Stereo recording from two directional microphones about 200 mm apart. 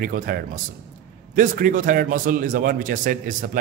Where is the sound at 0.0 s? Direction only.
45° right (ahead or behind).